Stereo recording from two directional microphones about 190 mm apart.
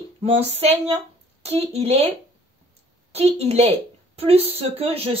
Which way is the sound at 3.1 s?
35° right (ahead or behind).